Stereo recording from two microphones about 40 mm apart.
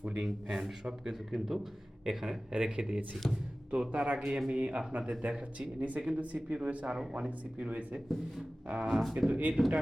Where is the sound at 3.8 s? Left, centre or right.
Right.